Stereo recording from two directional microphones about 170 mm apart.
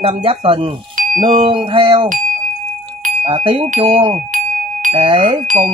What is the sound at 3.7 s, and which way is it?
Speech, 30° right (ahead or behind).